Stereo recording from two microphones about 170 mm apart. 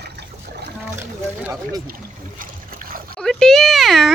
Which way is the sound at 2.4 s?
60° right (ahead or behind).